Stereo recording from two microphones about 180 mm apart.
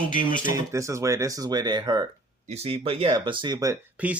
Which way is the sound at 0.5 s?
15° right (ahead or behind).